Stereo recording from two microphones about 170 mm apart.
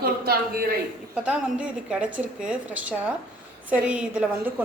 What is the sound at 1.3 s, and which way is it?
A woman's voice, 5° right (ahead or behind).